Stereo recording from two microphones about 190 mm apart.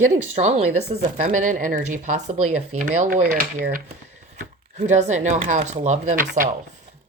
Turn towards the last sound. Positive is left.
turn(degrees=-45)  # may be behind; listen again after turning